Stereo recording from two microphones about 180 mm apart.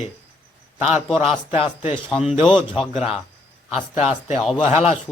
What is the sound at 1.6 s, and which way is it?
Speech, 30° left (ahead or behind).